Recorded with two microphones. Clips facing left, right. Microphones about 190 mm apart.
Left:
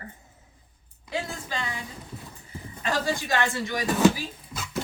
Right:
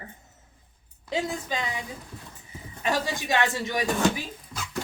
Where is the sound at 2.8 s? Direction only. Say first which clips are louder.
Even; 20° right (ahead or behind).